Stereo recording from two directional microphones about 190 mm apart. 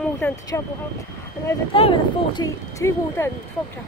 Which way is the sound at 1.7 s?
25° left (ahead or behind).